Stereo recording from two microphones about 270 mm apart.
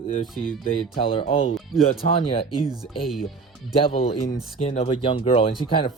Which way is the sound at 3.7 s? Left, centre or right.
Left.